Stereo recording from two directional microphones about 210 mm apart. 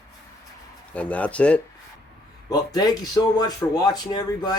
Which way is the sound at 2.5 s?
20° left (ahead or behind).